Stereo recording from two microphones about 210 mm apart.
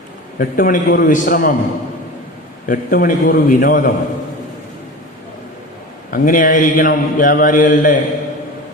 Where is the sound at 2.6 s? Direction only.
40° left (ahead or behind).